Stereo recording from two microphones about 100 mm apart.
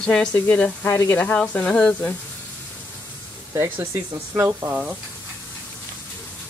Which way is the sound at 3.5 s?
25° right (ahead or behind).